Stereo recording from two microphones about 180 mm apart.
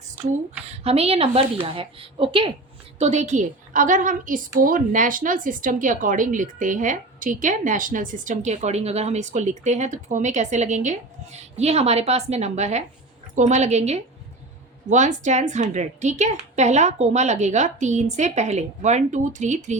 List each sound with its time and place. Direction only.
0.7 s a woman's voice: 35° right (ahead or behind)
3.0 s a woman's voice: 40° right (ahead or behind)